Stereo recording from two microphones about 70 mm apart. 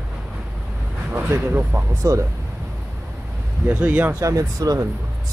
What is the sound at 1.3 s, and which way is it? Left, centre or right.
Speech, right.